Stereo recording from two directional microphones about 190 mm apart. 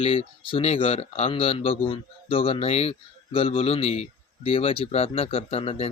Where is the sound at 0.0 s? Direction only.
30° left (ahead or behind).